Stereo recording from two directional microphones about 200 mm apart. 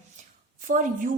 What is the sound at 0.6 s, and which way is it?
Speech, 40° right (ahead or behind).